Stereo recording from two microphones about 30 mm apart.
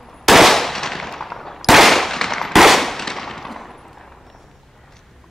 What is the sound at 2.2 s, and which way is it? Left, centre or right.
Firecracker, centre.